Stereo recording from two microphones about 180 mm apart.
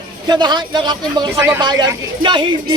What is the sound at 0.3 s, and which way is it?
A man's voice, 25° right (ahead or behind).